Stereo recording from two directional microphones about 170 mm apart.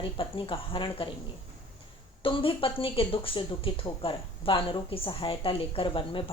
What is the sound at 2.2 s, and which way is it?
Speech, 30° left (ahead or behind).